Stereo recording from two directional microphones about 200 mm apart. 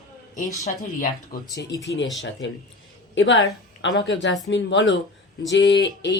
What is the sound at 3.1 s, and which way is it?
A woman's voice, 65° left (ahead or behind).